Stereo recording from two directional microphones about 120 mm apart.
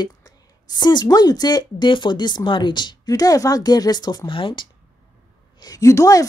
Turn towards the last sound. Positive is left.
turn(degrees=30)  # may be behind; listen again after turning